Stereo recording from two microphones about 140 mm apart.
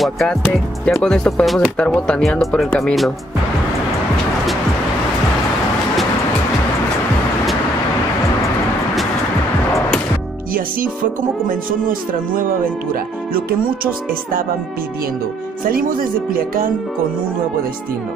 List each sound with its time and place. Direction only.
0.0 s speech: 5° left (ahead or behind)
11.4 s speech: 85° right
15.6 s speech: 90° right